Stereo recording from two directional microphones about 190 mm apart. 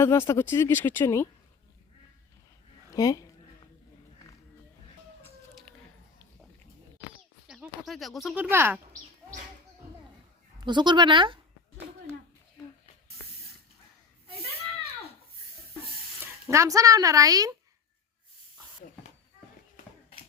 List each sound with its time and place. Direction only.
0.0 s speech: 15° left (ahead or behind)
2.9 s a sound: 20° left (ahead or behind)
7.4 s speech: 5° right (ahead or behind)
8.4 s speech: 10° right (ahead or behind)
10.7 s speech: 25° right (ahead or behind)
16.2 s speech: 15° right (ahead or behind)